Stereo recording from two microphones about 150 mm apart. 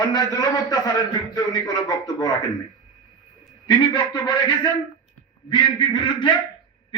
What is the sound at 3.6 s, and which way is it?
A man's voice, 30° left (ahead or behind).